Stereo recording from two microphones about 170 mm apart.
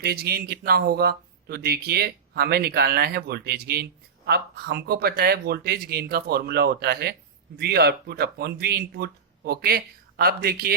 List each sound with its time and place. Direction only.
0.0 s speech: 65° right (ahead or behind)